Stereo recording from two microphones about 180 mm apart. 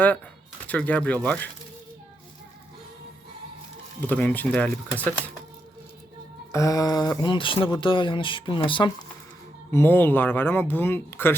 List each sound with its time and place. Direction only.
0.7 s speech: 10° left (ahead or behind)
4.0 s speech: 10° left (ahead or behind)
6.5 s speech: 20° left (ahead or behind)
9.7 s speech: 10° left (ahead or behind)